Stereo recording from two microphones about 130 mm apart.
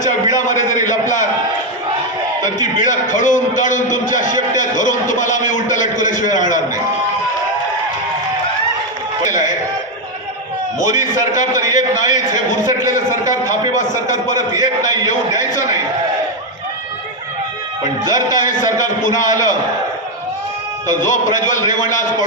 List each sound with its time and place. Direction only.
0.0 s a sound: 75° left (ahead or behind)
2.4 s music: 75° left (ahead or behind)
9.3 s a sound: 75° left (ahead or behind)
10.8 s a man's voice: 75° left (ahead or behind)
18.0 s a man's voice: 80° left
20.8 s a man's voice: 80° left